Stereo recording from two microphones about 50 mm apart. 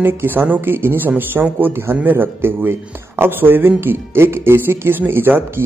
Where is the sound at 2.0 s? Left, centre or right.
Right.